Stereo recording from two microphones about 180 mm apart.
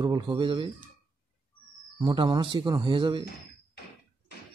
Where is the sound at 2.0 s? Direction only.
25° right (ahead or behind).